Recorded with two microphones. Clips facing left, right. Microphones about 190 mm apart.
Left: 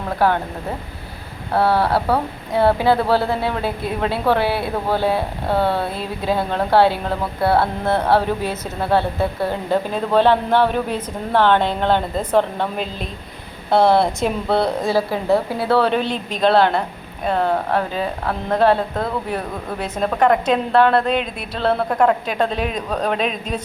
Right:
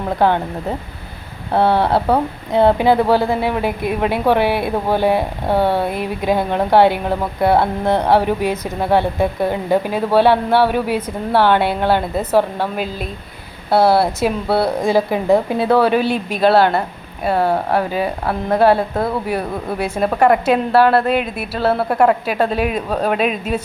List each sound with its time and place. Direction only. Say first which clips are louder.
0.2 s speech: right 2 dB; 20° right (ahead or behind)
1.5 s speech: right 2 dB; 20° right (ahead or behind)
15.8 s speech: right 4 dB; 10° right (ahead or behind)